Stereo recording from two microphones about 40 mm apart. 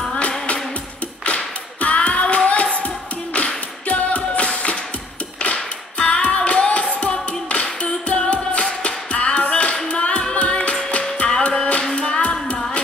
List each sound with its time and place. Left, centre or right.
1.2 s clapping: left
3.3 s tap: left
5.4 s music: left